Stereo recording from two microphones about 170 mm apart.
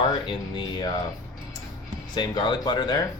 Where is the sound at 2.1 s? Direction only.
25° left (ahead or behind).